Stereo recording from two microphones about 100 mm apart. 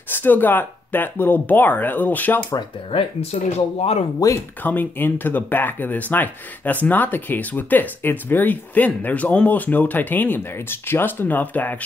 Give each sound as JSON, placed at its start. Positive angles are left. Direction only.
{"t": 0.1, "sound": "speech", "side_deg": 20}
{"t": 2.9, "sound": "speech", "side_deg": 80}
{"t": 4.2, "sound": "speech", "side_deg": 35}
{"t": 4.6, "sound": "speech", "side_deg": 20}